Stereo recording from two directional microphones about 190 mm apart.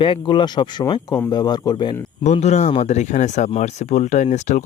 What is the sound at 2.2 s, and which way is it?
Speech, 35° left (ahead or behind).